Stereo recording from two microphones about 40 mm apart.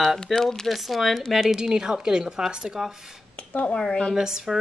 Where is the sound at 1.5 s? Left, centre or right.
Centre.